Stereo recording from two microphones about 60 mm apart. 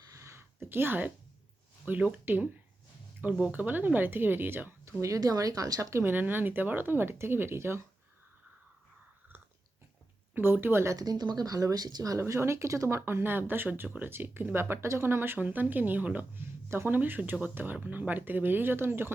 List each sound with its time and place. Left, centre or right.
0.1 s a sound: right
0.3 s a sound: right
1.8 s speech: right
3.5 s speech: right
4.9 s speech: right
6.0 s speech: right
10.3 s speech: right
10.9 s speech: right
12.2 s speech: right
16.6 s speech: right